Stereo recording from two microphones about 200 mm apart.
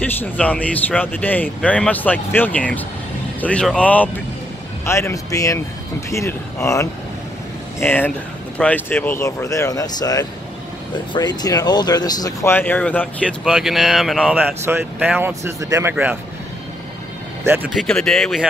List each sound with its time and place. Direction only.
0.0 s speech: 10° left (ahead or behind); by 16.2 s 10° right (ahead or behind)
17.7 s speech: 5° left (ahead or behind)